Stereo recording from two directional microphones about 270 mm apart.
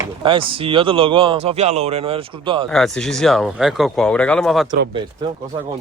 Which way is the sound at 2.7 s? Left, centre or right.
Centre.